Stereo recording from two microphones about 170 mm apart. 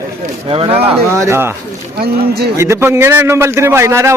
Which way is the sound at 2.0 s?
65° right (ahead or behind).